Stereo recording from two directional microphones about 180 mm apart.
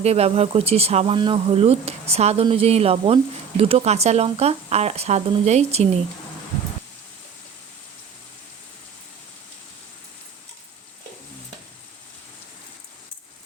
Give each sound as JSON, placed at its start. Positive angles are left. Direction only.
{"t": 0.0, "sound": "speech", "side_deg": -35}